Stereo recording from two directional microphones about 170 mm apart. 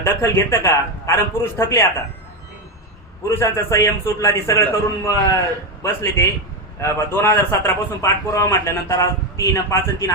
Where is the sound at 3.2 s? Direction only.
15° left (ahead or behind).